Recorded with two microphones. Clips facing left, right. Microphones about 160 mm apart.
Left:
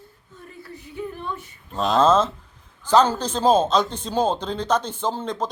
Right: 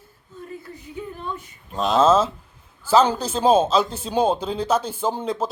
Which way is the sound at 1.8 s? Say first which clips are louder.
Right 1 dB; centre (ahead or behind).